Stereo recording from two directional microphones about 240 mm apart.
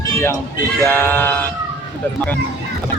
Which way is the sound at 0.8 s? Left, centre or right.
Centre.